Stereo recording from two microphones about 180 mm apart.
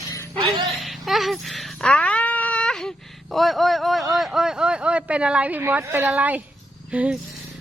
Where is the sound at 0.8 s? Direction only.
Centre (ahead or behind).